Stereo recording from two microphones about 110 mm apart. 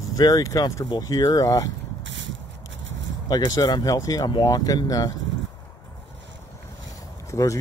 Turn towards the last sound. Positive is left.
turn(degrees=30)  # may be behind; listen again after turning